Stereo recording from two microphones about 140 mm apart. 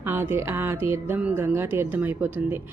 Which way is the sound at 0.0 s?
15° right (ahead or behind).